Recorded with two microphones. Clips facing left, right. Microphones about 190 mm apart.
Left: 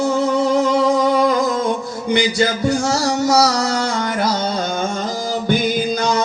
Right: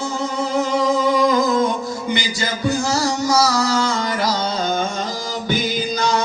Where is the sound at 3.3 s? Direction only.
65° left (ahead or behind).